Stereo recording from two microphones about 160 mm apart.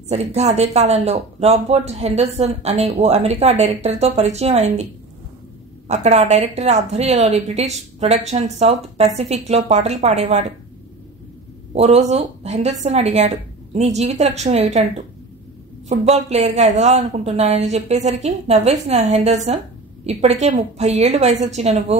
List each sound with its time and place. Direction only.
0.1 s speech: 45° right (ahead or behind)
5.9 s speech: 45° right (ahead or behind)
11.7 s speech: 45° right (ahead or behind)